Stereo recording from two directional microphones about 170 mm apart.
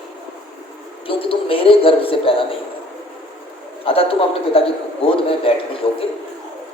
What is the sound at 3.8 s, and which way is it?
Speech, 30° left (ahead or behind).